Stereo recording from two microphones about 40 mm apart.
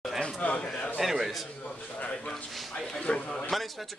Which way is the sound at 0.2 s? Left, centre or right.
Left.